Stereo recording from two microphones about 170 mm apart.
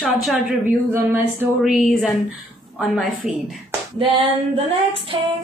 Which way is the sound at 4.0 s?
35° right (ahead or behind).